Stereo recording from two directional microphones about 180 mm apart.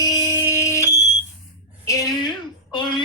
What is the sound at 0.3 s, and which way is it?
Fire alarm, 10° right (ahead or behind).